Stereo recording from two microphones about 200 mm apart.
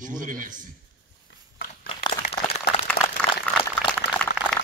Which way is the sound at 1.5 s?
45° left (ahead or behind).